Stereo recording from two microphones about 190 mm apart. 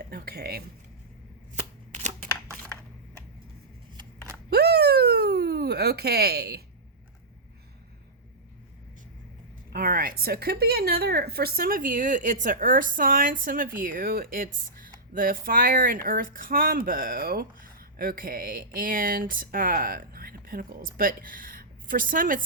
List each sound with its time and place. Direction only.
0.1 s speech: 55° right (ahead or behind)
1.5 s shuffling cards: 40° right (ahead or behind)
3.9 s shuffling cards: 15° right (ahead or behind)
4.4 s a sound: 55° right (ahead or behind)
9.6 s a woman's voice: 50° right (ahead or behind)